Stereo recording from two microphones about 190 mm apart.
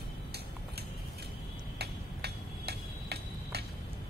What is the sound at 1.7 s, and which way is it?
Tick-tock, 60° right (ahead or behind).